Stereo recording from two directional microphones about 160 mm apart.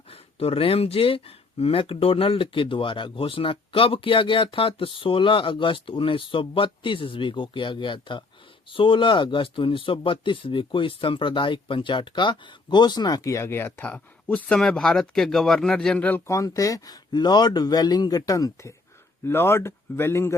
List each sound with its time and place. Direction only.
0.1 s speech: 40° left (ahead or behind); by 20.3 s 15° left (ahead or behind)